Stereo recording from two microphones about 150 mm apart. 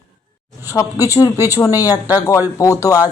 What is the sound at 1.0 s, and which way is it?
Speech, 20° left (ahead or behind).